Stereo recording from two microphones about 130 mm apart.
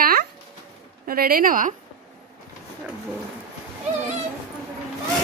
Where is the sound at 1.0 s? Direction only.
90° right.